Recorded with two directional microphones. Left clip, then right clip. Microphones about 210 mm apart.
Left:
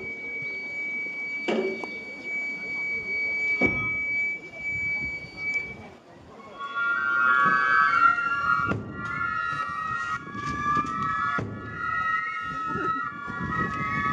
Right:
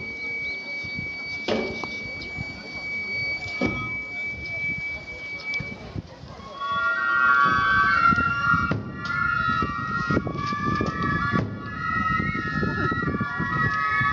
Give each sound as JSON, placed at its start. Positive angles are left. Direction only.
{"t": 1.4, "sound": "a sound", "side_deg": 40}
{"t": 3.5, "sound": "a sound", "side_deg": 35}
{"t": 6.8, "sound": "music", "side_deg": 45}
{"t": 9.3, "sound": "vehicle", "side_deg": 50}
{"t": 12.1, "sound": "emergency vehicle", "side_deg": 50}
{"t": 13.5, "sound": "vehicle", "side_deg": 45}